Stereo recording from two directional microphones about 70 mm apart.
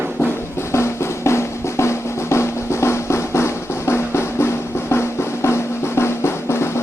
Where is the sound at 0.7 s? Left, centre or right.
Left.